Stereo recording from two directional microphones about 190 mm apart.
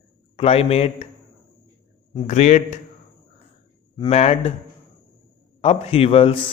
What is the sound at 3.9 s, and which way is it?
Speech, 35° left (ahead or behind).